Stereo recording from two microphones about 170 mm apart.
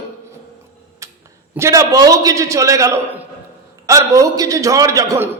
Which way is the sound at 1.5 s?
15° right (ahead or behind).